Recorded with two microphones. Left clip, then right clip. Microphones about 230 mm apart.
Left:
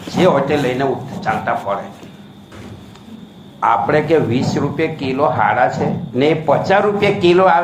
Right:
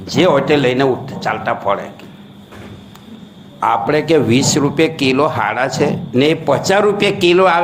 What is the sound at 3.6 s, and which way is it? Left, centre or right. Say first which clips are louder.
Speech: even; right.